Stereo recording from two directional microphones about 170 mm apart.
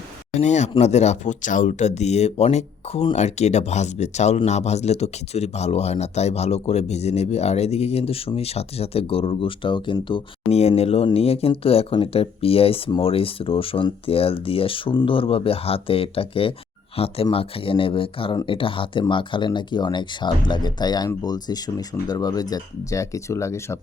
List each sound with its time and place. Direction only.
0.3 s speech: 45° left (ahead or behind); by 23.7 s 15° left (ahead or behind)